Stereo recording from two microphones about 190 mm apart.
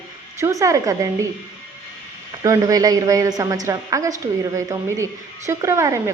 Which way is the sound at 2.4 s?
20° right (ahead or behind).